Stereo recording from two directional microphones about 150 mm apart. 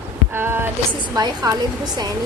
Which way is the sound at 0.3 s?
15° right (ahead or behind).